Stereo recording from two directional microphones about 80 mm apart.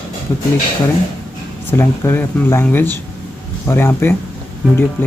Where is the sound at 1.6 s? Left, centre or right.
Left.